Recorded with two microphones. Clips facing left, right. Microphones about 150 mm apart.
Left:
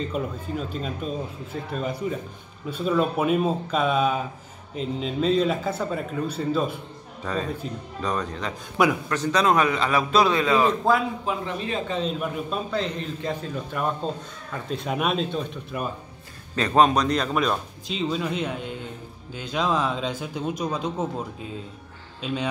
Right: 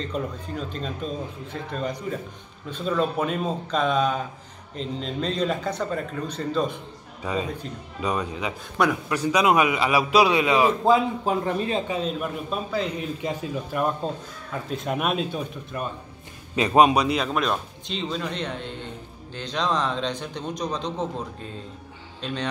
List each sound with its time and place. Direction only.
0.0 s a man's voice: 5° left (ahead or behind)
7.2 s a man's voice: 10° right (ahead or behind)
8.8 s speech: 5° left (ahead or behind)
9.1 s a man's voice: 10° right (ahead or behind)
11.2 s a man's voice: 35° right (ahead or behind)
11.9 s speech: 5° right (ahead or behind)
16.5 s a man's voice: 10° right (ahead or behind); by 22.5 s 5° left (ahead or behind)